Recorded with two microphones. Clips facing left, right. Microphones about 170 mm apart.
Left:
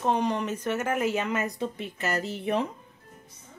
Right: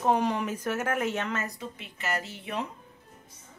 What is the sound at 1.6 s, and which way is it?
Speech, 40° left (ahead or behind).